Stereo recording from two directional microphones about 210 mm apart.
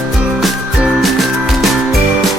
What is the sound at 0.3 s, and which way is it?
Music, 5° right (ahead or behind).